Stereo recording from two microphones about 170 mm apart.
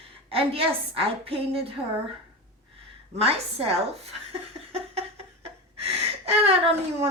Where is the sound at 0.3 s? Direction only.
35° right (ahead or behind).